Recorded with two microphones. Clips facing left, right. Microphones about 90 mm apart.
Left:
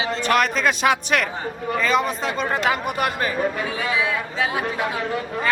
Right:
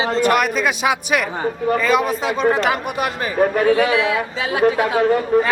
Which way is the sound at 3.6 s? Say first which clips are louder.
Right 8 dB; 60° right (ahead or behind).